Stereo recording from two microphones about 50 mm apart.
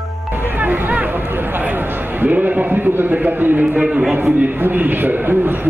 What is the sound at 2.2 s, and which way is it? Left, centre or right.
A man's voice, right.